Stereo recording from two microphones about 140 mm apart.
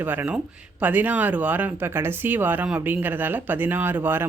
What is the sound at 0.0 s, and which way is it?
Speech, 15° right (ahead or behind).